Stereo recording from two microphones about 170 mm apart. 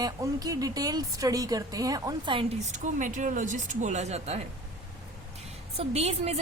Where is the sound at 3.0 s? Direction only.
45° right (ahead or behind).